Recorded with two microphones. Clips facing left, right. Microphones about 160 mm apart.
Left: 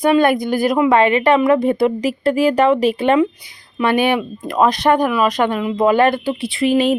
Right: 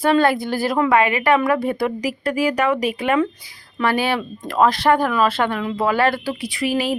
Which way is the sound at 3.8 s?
20° left (ahead or behind).